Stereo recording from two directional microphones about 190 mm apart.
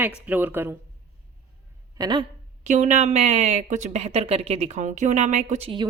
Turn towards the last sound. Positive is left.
turn(degrees=-30)  # may be behind; listen again after turning